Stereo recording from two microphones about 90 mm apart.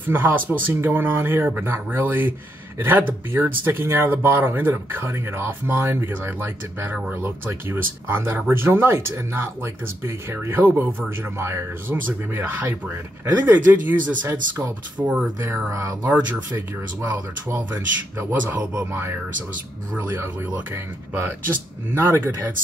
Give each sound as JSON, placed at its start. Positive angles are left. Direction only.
{"t": 0.0, "sound": "speech", "side_deg": -25}
{"t": 15.7, "sound": "speech", "side_deg": -35}
{"t": 16.0, "sound": "speech", "side_deg": -20}